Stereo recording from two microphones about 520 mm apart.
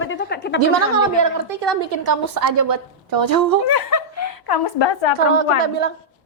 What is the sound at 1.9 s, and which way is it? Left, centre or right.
A woman's voice, right.